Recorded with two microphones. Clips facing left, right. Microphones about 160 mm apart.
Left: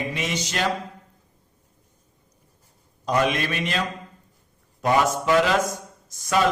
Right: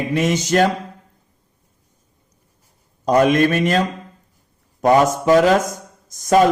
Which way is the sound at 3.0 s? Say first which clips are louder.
Right 9 dB; 45° right (ahead or behind).